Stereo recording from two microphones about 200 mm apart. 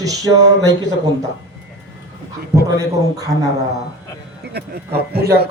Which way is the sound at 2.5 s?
15° right (ahead or behind).